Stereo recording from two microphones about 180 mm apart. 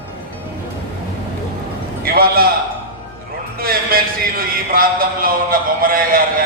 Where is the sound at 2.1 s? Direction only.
55° right (ahead or behind).